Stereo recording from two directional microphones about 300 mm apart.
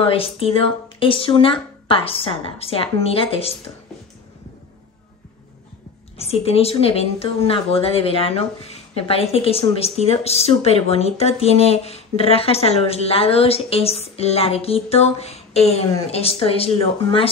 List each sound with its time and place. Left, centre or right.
0.0 s speech: centre
6.1 s a woman's voice: centre